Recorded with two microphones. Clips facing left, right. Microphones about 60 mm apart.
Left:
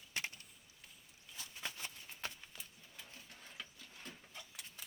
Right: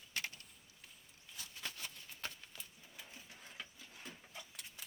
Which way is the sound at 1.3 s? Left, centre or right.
Centre.